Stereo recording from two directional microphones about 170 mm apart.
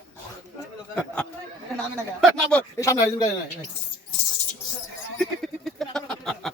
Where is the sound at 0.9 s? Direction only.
5° left (ahead or behind).